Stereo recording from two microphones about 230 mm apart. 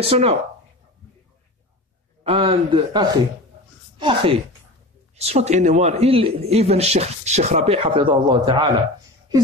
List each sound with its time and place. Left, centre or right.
0.0 s a man's voice: right
2.2 s a man's voice: right